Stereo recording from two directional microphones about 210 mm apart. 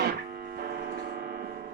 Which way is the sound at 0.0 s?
45° right (ahead or behind).